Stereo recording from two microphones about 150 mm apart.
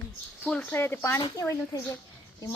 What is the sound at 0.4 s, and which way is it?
A woman's voice, 10° left (ahead or behind).